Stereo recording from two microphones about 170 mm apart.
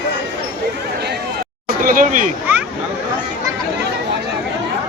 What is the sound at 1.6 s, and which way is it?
Speech, 55° right (ahead or behind).